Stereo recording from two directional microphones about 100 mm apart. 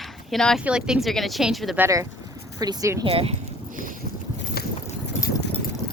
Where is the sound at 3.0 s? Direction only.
70° right (ahead or behind).